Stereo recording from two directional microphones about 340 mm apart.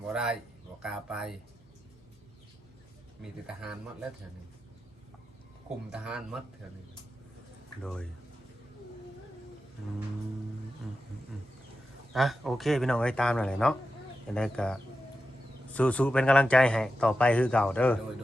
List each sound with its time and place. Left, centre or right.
0.1 s speech: centre
3.4 s speech: centre
5.9 s speech: centre
12.1 s speech: centre